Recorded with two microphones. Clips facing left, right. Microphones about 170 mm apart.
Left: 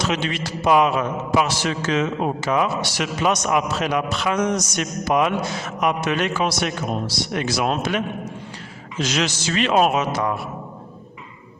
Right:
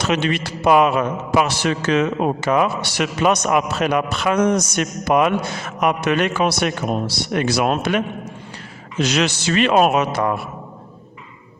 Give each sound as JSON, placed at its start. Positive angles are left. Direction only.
{"t": 0.0, "sound": "a man's voice", "side_deg": -60}